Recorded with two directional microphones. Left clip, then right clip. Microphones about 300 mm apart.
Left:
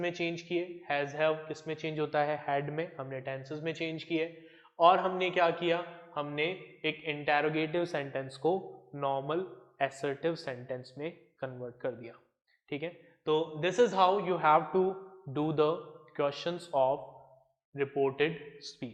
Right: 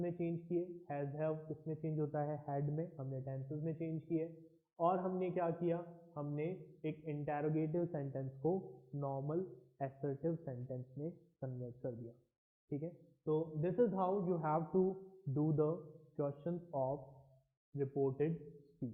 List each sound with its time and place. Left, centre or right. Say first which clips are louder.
0.0 s speech: left 8 dB; centre
8.4 s speech: left 8 dB; left
16.7 s speech: left 12 dB; left